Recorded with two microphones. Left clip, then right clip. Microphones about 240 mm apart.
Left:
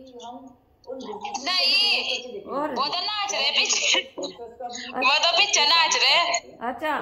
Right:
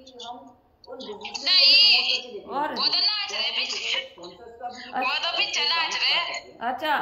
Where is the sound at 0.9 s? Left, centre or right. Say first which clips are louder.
Left 2 dB; centre.